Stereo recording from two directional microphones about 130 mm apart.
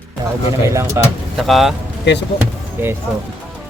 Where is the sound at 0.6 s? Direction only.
20° right (ahead or behind).